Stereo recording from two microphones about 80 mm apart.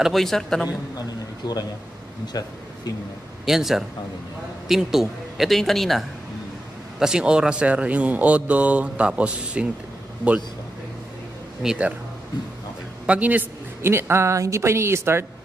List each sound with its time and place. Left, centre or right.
0.0 s speech: centre
1.4 s a man's voice: left
3.4 s speech: centre
7.0 s a man's voice: centre
11.6 s a man's voice: centre
13.0 s a man's voice: centre
13.8 s speech: right